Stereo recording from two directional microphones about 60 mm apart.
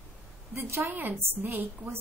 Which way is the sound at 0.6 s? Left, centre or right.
Right.